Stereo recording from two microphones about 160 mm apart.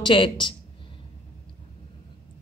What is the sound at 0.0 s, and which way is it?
Speech, 30° left (ahead or behind).